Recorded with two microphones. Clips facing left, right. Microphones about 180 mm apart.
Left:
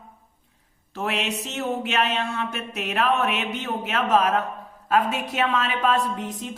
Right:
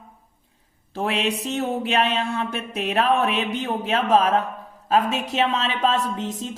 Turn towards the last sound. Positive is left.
turn(degrees=-25)  # may be behind; listen again after turning